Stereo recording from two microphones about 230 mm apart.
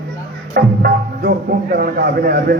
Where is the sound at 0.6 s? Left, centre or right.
Right.